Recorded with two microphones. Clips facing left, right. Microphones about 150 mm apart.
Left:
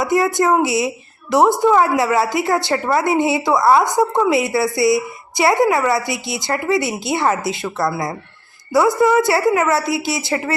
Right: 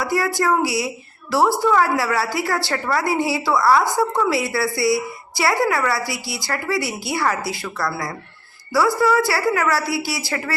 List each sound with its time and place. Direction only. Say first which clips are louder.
0.0 s a woman's voice: left 4 dB; 20° left (ahead or behind)